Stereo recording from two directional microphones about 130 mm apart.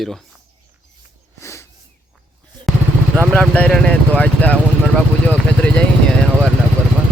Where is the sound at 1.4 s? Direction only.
20° left (ahead or behind).